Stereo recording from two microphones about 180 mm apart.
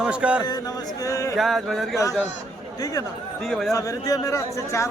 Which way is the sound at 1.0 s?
20° left (ahead or behind).